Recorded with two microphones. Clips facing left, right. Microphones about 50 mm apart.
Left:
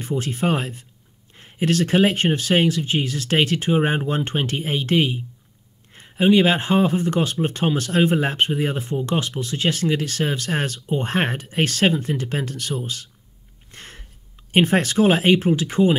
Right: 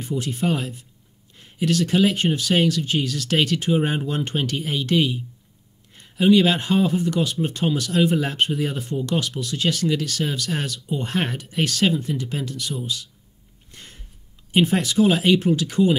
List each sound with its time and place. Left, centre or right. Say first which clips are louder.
0.0 s speech: left 1 dB; left
13.7 s a sound: left 4 dB; left
14.5 s speech: left 2 dB; left